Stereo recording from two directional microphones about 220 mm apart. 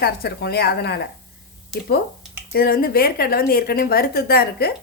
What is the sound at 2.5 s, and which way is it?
Speech, 45° left (ahead or behind).